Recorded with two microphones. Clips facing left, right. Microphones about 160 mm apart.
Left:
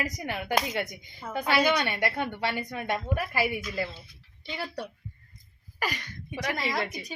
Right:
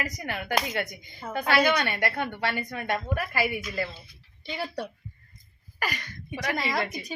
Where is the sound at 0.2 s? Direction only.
15° left (ahead or behind).